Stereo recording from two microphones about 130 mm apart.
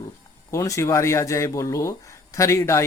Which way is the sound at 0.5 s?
25° left (ahead or behind).